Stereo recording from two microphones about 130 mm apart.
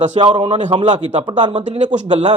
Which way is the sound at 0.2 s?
40° right (ahead or behind).